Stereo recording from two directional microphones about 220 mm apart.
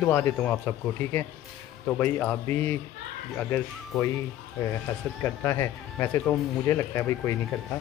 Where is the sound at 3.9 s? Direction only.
15° left (ahead or behind).